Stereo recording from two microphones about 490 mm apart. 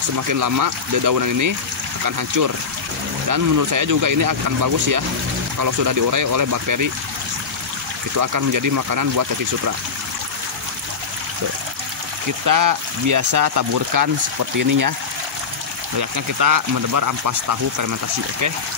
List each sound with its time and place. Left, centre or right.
0.3 s speech: right
8.2 s speech: right
12.4 s speech: right
16.0 s speech: right